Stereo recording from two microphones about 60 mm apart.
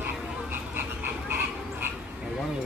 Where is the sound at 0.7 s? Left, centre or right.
Right.